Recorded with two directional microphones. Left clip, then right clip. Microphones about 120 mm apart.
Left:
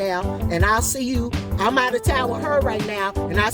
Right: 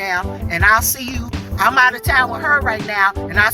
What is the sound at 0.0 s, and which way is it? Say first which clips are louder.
Speech: right 3 dB; 30° left (ahead or behind).